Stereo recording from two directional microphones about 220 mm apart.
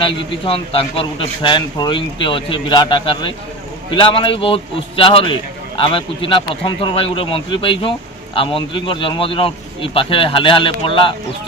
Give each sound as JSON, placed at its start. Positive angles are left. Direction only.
{"t": 0.0, "sound": "a man's voice", "side_deg": 25}